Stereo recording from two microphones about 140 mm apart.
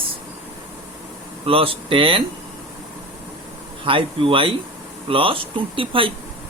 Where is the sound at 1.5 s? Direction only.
40° right (ahead or behind).